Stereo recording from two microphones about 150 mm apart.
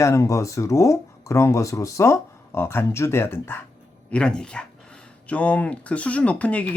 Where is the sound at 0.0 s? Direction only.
20° left (ahead or behind).